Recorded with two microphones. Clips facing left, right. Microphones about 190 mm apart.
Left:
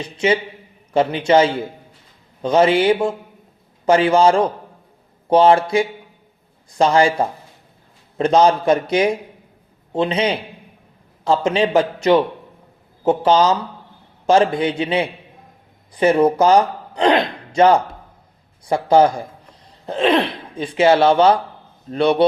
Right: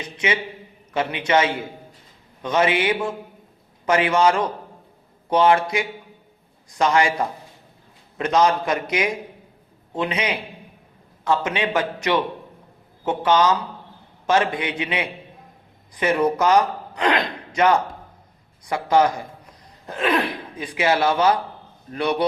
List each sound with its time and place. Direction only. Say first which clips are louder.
0.0 s a man's voice: left 6 dB; 30° left (ahead or behind)